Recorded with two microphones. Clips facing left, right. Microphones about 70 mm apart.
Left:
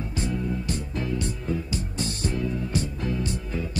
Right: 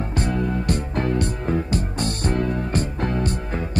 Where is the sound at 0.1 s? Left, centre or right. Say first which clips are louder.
Right 5 dB; right.